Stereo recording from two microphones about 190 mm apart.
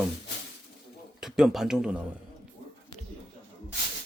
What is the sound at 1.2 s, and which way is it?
Speech, centre (ahead or behind).